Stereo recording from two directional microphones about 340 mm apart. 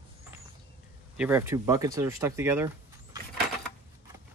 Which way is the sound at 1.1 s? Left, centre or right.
Centre.